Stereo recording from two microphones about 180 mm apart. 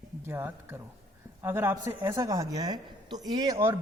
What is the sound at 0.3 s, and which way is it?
A woman's voice, 10° right (ahead or behind).